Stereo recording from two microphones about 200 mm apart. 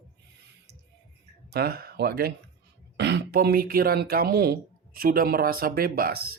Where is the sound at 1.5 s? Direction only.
50° right (ahead or behind).